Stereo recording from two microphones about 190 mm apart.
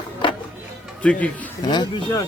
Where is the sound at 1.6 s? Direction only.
20° left (ahead or behind).